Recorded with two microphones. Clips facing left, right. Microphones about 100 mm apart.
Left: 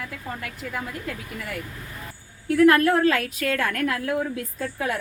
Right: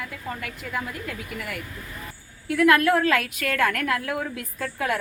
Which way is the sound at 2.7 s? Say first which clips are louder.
Right 1 dB; 30° left (ahead or behind).